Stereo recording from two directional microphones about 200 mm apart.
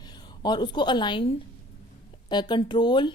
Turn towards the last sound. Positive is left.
turn(degrees=25)  # may be behind; listen again after turning